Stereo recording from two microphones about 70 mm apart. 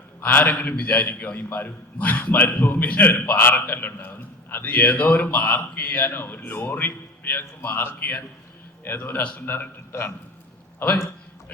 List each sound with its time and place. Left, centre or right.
0.2 s a man's voice: left